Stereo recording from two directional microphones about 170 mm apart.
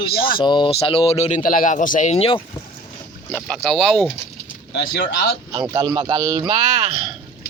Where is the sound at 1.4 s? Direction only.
50° left (ahead or behind); by 2.4 s 35° left (ahead or behind).